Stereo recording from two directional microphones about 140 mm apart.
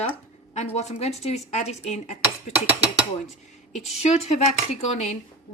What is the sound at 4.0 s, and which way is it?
Dishes, 50° left (ahead or behind).